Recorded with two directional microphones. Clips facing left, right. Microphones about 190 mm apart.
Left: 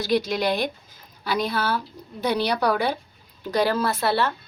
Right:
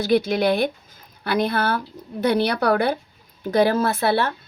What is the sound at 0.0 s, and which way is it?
A woman's voice, 55° right (ahead or behind).